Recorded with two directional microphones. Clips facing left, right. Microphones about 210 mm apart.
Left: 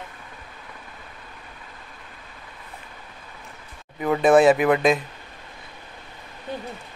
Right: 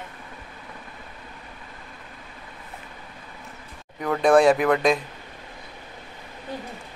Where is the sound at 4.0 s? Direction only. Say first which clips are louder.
Left 1 dB; 5° left (ahead or behind).